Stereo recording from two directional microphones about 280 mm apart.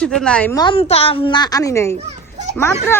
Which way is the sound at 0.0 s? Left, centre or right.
Centre.